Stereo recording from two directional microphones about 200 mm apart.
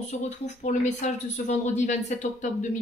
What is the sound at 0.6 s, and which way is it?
A woman's voice, 35° left (ahead or behind).